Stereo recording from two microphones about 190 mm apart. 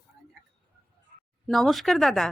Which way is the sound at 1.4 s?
Centre (ahead or behind).